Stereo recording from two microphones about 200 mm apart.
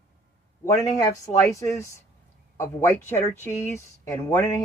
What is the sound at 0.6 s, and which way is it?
Speech, 15° left (ahead or behind).